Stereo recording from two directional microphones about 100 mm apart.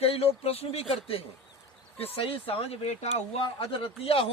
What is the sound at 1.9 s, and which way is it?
Speech, 70° left (ahead or behind).